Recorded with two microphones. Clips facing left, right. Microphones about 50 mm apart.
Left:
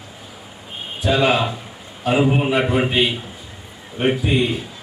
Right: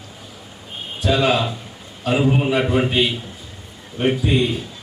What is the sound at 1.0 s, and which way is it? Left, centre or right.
A man's voice, centre.